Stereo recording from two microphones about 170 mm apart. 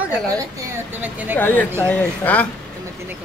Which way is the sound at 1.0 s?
10° right (ahead or behind).